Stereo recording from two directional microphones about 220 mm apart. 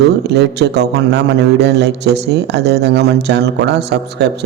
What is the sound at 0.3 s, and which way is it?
A man's voice, 50° right (ahead or behind).